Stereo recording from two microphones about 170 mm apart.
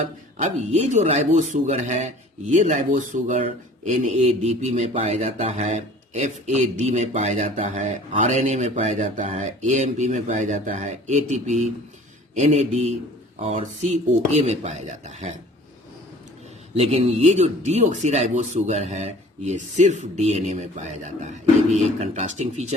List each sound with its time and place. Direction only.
0.0 s speech: 40° right (ahead or behind)
16.7 s speech: 35° right (ahead or behind)